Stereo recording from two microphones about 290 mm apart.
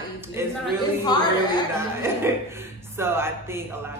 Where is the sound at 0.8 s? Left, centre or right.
Centre.